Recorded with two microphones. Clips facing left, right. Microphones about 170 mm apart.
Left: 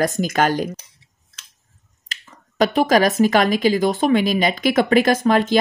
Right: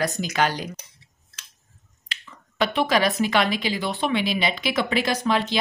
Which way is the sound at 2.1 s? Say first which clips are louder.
Even; 40° left (ahead or behind).